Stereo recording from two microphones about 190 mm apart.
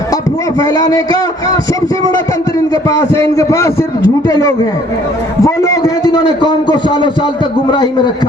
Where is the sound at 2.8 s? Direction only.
15° left (ahead or behind).